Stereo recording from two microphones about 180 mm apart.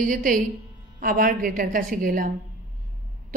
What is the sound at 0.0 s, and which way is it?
A woman's voice, 50° right (ahead or behind).